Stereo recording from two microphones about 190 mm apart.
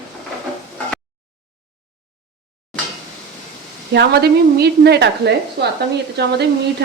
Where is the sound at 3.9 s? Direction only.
60° right (ahead or behind).